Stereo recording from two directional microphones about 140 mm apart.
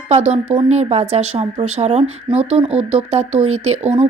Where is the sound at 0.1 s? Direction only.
50° right (ahead or behind).